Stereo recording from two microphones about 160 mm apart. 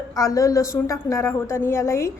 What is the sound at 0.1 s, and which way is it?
A woman's voice, 20° left (ahead or behind).